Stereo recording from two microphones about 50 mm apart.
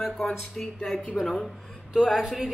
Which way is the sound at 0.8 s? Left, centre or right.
Centre.